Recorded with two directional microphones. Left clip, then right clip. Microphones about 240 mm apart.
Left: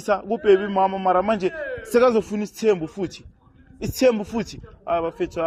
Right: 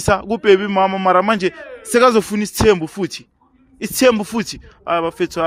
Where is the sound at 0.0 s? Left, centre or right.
Right.